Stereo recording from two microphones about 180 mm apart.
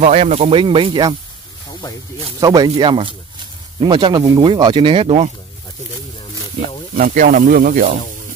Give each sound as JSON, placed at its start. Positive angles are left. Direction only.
{"t": 0.0, "sound": "speech", "side_deg": -35}
{"t": 2.4, "sound": "speech", "side_deg": -20}
{"t": 7.0, "sound": "speech", "side_deg": -50}